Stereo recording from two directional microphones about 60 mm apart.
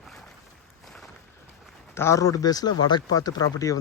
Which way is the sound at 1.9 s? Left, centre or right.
Left.